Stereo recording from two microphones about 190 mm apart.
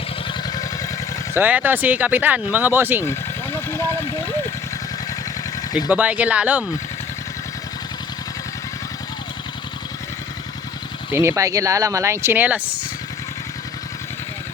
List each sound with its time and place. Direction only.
0.3 s vehicle: 20° left (ahead or behind)
1.3 s speech: 10° right (ahead or behind)
3.0 s vehicle: 15° left (ahead or behind)
5.9 s speech: 10° right (ahead or behind)
11.1 s speech: 15° right (ahead or behind)